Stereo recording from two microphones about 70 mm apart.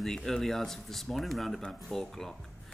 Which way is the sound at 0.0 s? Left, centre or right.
Centre.